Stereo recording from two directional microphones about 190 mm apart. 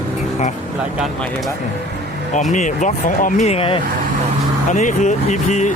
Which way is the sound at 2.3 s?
40° left (ahead or behind).